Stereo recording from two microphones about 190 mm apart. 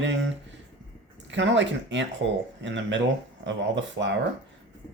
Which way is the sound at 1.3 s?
75° right (ahead or behind).